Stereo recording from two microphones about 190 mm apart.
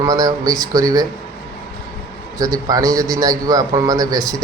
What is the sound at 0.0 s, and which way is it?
A man's voice, 20° right (ahead or behind).